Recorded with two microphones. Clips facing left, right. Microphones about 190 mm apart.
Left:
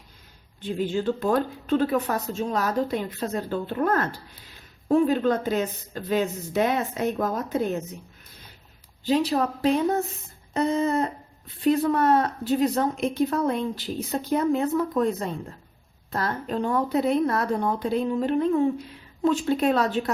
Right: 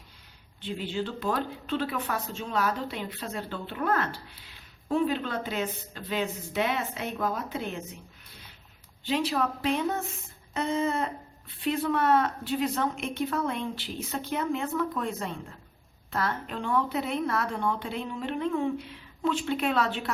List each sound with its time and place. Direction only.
0.6 s a woman's voice: 45° left (ahead or behind)
9.0 s a woman's voice: 40° left (ahead or behind)